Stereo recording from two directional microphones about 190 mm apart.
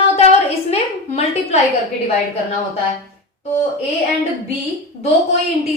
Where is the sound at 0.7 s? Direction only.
35° left (ahead or behind).